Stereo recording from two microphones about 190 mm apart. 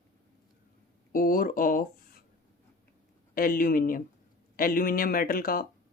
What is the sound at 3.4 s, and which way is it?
Speech, 50° left (ahead or behind).